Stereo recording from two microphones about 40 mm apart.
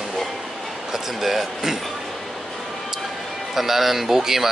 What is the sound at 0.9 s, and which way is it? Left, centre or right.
Speech, centre.